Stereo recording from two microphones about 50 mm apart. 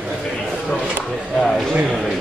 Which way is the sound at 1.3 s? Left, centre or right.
Centre.